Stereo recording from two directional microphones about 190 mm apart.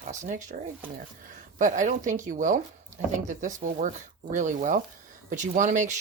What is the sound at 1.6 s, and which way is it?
Speech, 40° right (ahead or behind).